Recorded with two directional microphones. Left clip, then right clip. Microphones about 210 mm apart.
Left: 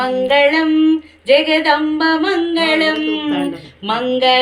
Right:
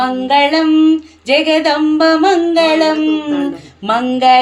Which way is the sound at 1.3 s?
45° right (ahead or behind).